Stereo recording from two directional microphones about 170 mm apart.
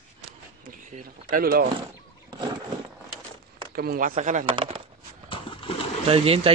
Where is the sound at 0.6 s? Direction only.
55° right (ahead or behind).